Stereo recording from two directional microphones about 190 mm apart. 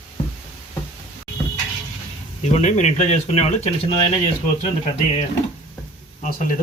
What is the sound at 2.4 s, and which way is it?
Speech, 40° left (ahead or behind).